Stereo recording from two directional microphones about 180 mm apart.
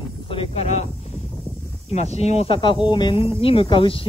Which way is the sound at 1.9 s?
35° left (ahead or behind).